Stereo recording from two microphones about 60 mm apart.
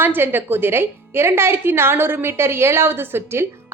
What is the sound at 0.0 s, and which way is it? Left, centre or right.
A woman's voice, right.